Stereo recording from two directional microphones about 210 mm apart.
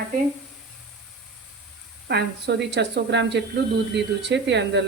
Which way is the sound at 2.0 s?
50° right (ahead or behind).